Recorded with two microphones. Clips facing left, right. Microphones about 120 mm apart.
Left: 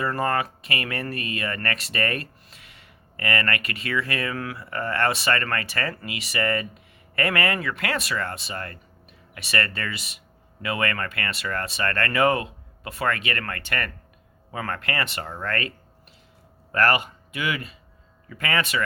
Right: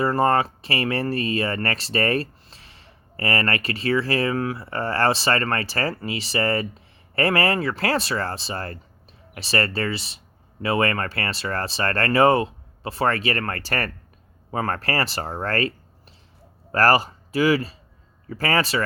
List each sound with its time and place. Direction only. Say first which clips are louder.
0.0 s speech: right 5 dB; 30° right (ahead or behind)
16.7 s speech: right 4 dB; 35° right (ahead or behind)